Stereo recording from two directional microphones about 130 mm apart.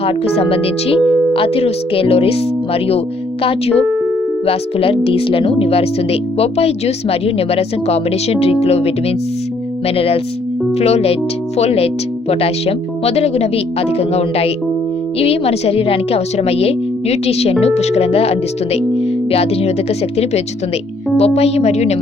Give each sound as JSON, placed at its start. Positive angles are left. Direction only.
{"t": 0.0, "sound": "a woman's voice", "side_deg": 45}